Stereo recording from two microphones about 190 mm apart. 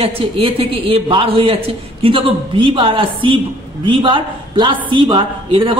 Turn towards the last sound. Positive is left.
turn(degrees=-25)  # may be behind; listen again after turning